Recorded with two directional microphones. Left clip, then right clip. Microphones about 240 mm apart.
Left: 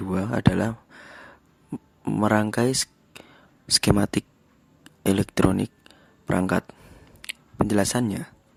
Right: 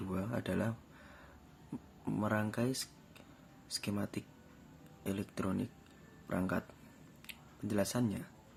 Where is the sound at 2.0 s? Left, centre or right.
Left.